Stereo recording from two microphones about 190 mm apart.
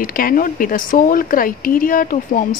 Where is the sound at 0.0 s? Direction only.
50° left (ahead or behind).